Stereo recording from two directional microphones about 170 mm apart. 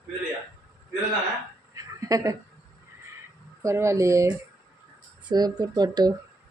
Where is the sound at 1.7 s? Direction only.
20° right (ahead or behind).